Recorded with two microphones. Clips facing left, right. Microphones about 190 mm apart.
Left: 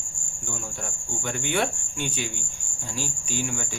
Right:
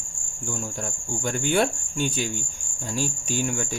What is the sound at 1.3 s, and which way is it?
Speech, 40° right (ahead or behind).